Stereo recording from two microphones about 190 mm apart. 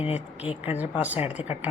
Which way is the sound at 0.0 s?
30° left (ahead or behind).